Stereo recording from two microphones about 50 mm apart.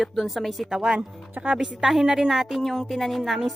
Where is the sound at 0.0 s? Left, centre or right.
Centre.